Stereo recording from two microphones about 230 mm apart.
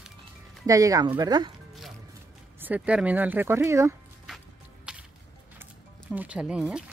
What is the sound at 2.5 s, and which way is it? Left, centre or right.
Speech, centre.